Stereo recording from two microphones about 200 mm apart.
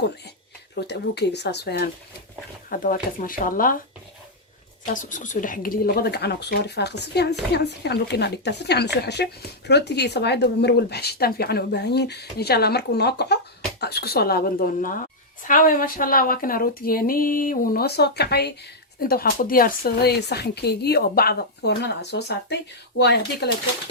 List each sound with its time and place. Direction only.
0.8 s speech: 55° left (ahead or behind)
2.6 s speech: 45° left (ahead or behind)
4.9 s speech: 40° left (ahead or behind); by 23.6 s 55° left (ahead or behind)